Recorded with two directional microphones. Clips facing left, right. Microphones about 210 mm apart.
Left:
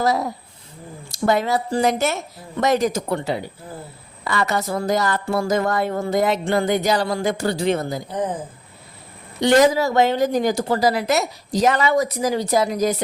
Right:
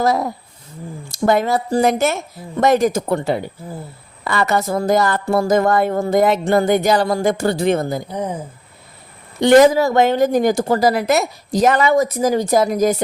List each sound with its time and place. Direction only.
1.1 s speech: 50° right (ahead or behind)
8.1 s speech: 10° right (ahead or behind)
9.4 s speech: 55° right (ahead or behind)